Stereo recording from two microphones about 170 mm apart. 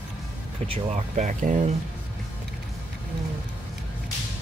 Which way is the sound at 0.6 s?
40° right (ahead or behind).